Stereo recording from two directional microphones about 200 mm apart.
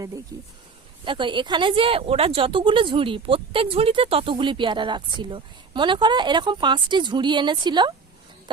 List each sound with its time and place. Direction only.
0.3 s speech: 20° right (ahead or behind)